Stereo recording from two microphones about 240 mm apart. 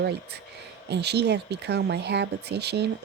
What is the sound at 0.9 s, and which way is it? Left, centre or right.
Speech, right.